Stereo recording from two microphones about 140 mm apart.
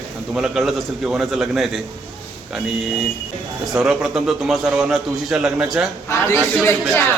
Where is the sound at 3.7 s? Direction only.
5° right (ahead or behind).